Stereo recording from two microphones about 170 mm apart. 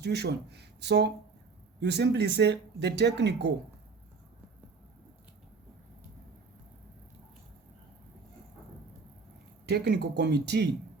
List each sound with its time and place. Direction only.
0.0 s speech: 75° right (ahead or behind)
9.6 s speech: 85° right